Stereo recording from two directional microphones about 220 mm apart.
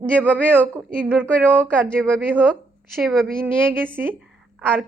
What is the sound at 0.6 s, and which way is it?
A woman's voice, 10° right (ahead or behind).